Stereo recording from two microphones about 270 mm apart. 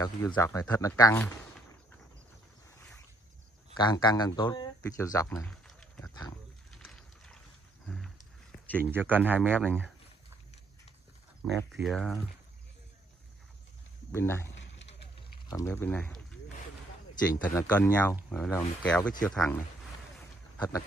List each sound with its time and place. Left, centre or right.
0.0 s speech: centre
3.7 s speech: centre
5.4 s run: centre
6.7 s a sound: centre
8.9 s speech: centre
11.5 s speech: centre
14.1 s speech: centre
17.6 s speech: centre